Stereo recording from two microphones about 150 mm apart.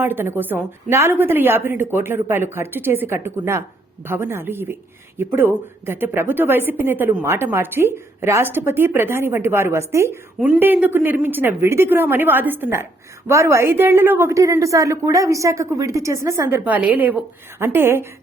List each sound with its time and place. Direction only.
0.0 s speech: 15° right (ahead or behind)